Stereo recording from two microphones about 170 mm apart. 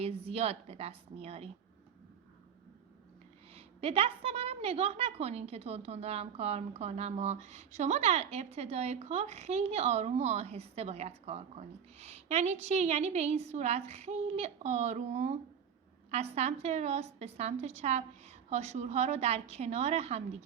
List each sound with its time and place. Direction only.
0.0 s a woman's voice: 35° right (ahead or behind)
3.5 s a woman's voice: 35° right (ahead or behind)